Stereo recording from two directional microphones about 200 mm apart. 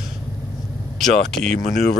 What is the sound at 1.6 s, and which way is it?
Speech, 45° left (ahead or behind).